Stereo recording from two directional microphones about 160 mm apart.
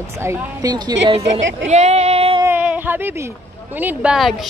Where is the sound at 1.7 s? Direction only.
45° right (ahead or behind).